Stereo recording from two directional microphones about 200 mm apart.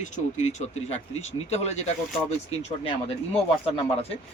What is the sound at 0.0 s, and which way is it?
A man's voice, 35° left (ahead or behind).